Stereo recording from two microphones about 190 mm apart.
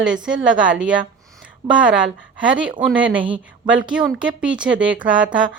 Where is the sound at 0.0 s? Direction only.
5° right (ahead or behind).